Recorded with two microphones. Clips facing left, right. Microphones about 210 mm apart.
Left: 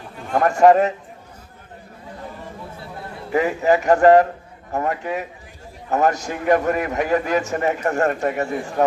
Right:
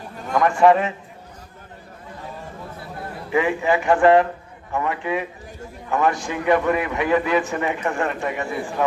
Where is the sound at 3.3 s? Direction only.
40° left (ahead or behind).